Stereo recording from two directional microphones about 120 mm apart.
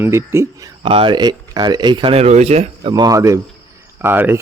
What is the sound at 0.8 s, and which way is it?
A man's voice, 50° right (ahead or behind).